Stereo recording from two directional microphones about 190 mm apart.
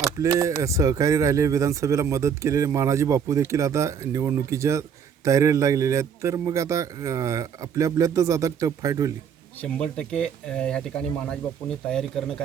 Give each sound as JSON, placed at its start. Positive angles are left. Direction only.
{"t": 0.2, "sound": "speech", "side_deg": -15}
{"t": 9.6, "sound": "speech", "side_deg": 5}